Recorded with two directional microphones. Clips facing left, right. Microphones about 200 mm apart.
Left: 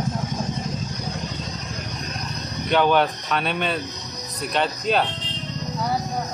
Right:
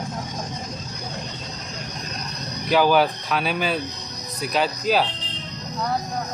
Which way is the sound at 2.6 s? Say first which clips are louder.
Right 1 dB; 5° right (ahead or behind).